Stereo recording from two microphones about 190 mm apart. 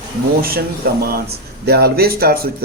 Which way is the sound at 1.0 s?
55° right (ahead or behind).